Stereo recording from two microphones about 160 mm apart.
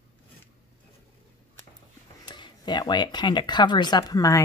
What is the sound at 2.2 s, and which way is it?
Speech, 30° left (ahead or behind).